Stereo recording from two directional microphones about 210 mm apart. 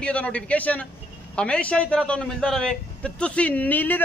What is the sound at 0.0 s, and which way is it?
A man's voice, 5° left (ahead or behind).